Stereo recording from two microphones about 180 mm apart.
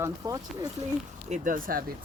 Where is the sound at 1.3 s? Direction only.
50° right (ahead or behind).